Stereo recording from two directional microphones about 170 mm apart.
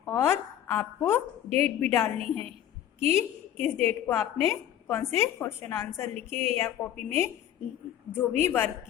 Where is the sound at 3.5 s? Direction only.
40° right (ahead or behind).